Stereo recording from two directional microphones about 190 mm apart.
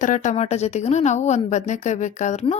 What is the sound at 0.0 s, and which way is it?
A woman's voice, 40° left (ahead or behind).